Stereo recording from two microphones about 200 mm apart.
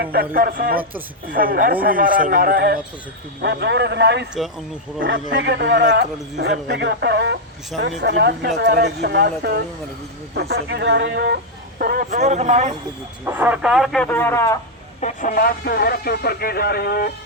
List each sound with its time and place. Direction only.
0.0 s speech: 50° right (ahead or behind)
3.4 s speech: 60° right (ahead or behind); by 12.7 s 35° right (ahead or behind)
13.2 s speech: 10° right (ahead or behind); by 14.6 s 15° left (ahead or behind)
15.0 s speech: 40° left (ahead or behind)